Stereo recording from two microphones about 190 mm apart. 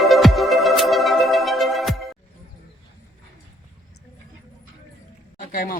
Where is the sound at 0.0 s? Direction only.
Centre (ahead or behind).